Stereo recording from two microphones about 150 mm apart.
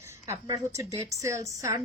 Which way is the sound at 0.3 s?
20° right (ahead or behind).